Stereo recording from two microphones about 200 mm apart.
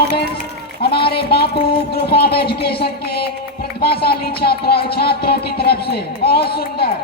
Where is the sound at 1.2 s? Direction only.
55° left (ahead or behind).